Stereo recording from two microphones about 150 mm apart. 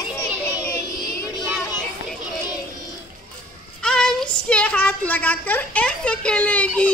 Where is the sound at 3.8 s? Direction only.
5° left (ahead or behind).